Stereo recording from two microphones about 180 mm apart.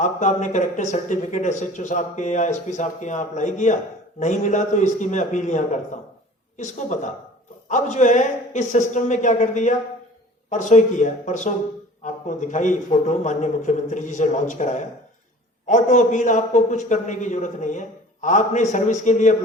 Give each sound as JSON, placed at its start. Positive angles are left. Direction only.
{"t": 0.0, "sound": "speech", "side_deg": 40}